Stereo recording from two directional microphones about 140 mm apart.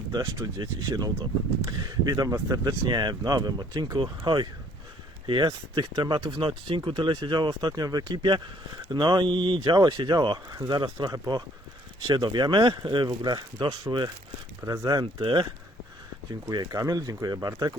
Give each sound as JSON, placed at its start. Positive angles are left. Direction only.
{"t": 0.1, "sound": "speech", "side_deg": -25}
{"t": 5.2, "sound": "speech", "side_deg": -30}
{"t": 16.5, "sound": "speech", "side_deg": -25}